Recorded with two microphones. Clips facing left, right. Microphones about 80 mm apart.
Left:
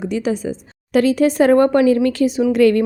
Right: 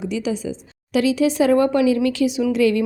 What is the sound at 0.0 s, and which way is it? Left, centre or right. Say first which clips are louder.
A woman's voice: left 3 dB; left.